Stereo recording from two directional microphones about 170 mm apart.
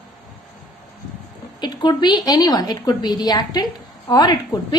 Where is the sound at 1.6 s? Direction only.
25° left (ahead or behind).